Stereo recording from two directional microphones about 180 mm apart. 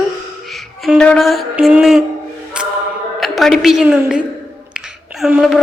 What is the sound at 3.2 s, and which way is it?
A woman's voice, centre (ahead or behind).